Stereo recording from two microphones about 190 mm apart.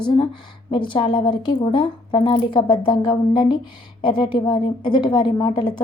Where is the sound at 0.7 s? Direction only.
25° left (ahead or behind).